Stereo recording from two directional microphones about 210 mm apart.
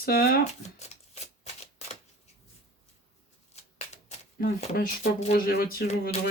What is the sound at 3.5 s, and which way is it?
Shuffling cards, 30° left (ahead or behind).